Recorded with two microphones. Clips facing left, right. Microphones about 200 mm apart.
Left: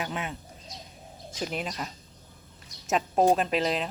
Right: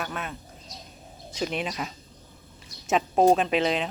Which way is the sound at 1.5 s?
5° right (ahead or behind).